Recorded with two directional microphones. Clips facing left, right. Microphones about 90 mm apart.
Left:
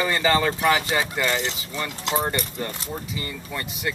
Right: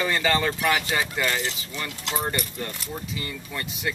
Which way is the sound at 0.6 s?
30° left (ahead or behind).